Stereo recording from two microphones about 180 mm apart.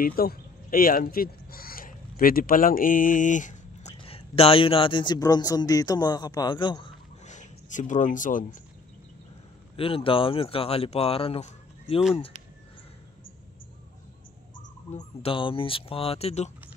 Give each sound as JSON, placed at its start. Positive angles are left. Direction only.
{"t": 0.0, "sound": "speech", "side_deg": 55}
{"t": 4.0, "sound": "a man's voice", "side_deg": 30}
{"t": 7.2, "sound": "speech", "side_deg": 45}
{"t": 9.8, "sound": "speech", "side_deg": 30}
{"t": 14.9, "sound": "speech", "side_deg": 35}